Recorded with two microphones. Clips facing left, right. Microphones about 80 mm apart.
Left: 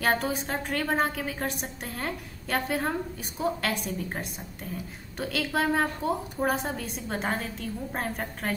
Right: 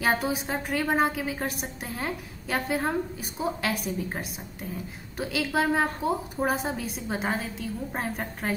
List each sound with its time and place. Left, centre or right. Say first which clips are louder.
0.0 s a woman's voice: right 1 dB; centre